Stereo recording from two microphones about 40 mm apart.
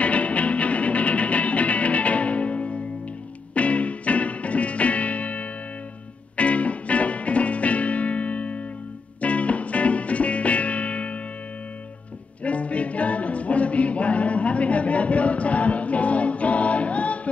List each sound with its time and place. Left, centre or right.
0.0 s music: left
12.4 s music: left